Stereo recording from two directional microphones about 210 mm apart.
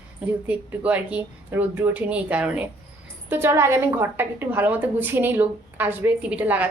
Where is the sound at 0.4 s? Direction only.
5° right (ahead or behind).